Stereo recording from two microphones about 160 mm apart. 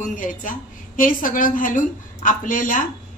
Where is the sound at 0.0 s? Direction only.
55° left (ahead or behind).